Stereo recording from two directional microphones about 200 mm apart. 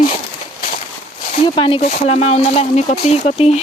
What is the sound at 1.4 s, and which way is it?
Speech, 25° left (ahead or behind).